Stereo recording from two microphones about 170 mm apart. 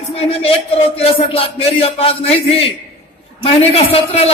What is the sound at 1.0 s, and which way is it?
A man's voice, 35° left (ahead or behind).